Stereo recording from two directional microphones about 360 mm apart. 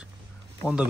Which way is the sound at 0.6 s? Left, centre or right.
Centre.